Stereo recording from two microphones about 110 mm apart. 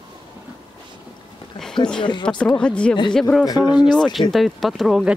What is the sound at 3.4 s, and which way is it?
Speech, 40° left (ahead or behind).